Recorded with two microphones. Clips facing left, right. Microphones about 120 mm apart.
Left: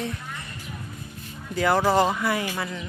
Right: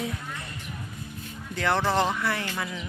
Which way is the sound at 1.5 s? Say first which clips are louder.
Left 4 dB; 10° left (ahead or behind).